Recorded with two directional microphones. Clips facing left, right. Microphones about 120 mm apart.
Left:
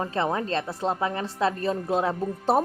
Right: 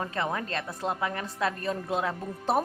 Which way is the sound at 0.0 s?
30° left (ahead or behind).